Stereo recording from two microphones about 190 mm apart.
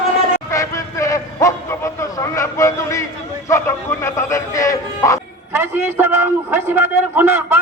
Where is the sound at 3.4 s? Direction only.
15° left (ahead or behind).